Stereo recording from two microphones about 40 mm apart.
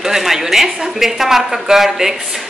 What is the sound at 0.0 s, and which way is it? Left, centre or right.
Speech, centre.